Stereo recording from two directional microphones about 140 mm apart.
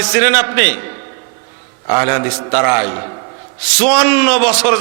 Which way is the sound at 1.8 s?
20° right (ahead or behind).